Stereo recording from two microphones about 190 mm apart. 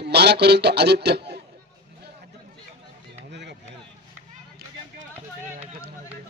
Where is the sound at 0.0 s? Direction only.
60° right (ahead or behind).